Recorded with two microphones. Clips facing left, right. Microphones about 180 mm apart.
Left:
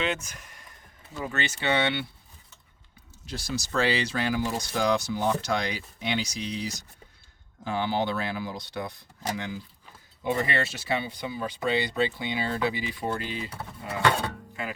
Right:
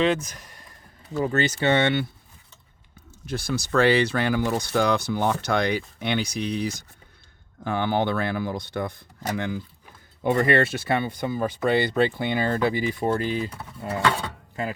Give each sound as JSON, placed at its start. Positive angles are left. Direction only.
{"t": 0.0, "sound": "speech", "side_deg": -35}
{"t": 3.2, "sound": "speech", "side_deg": -55}
{"t": 14.6, "sound": "speech", "side_deg": -40}